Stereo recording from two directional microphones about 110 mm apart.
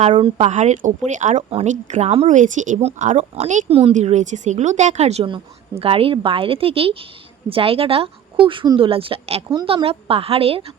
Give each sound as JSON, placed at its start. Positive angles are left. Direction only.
{"t": 0.3, "sound": "speech", "side_deg": -90}
{"t": 3.9, "sound": "speech", "side_deg": -90}
{"t": 5.8, "sound": "speech", "side_deg": -60}
{"t": 8.9, "sound": "speech", "side_deg": -55}